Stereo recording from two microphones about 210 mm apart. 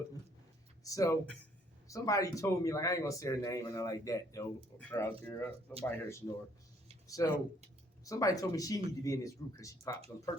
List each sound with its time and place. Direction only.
0.9 s speech: 15° left (ahead or behind)